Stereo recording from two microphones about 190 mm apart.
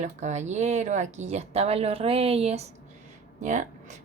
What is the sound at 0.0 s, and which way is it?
Speech, 40° right (ahead or behind).